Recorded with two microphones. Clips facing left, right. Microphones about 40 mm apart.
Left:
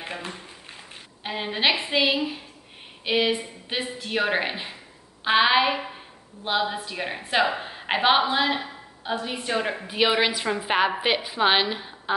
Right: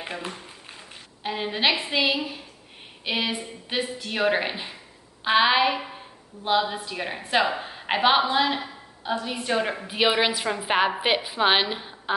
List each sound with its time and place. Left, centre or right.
0.1 s a woman's voice: centre
3.0 s a sound: centre
3.6 s a woman's voice: centre